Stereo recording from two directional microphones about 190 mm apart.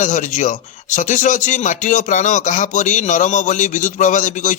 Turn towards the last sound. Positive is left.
turn(degrees=40)  # may be behind; listen again after turning